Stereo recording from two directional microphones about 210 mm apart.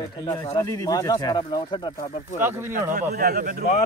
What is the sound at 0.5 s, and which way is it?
Speech, 15° left (ahead or behind).